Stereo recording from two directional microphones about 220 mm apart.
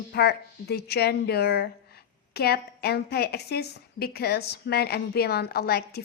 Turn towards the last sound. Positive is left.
turn(degrees=45)  # may be behind; listen again after turning